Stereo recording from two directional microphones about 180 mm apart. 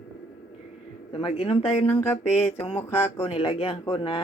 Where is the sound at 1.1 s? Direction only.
30° left (ahead or behind).